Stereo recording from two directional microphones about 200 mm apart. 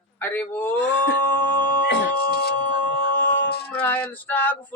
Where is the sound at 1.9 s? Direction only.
55° left (ahead or behind).